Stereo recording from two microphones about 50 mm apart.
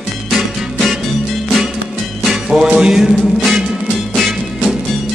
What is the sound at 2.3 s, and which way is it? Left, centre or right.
Music, centre.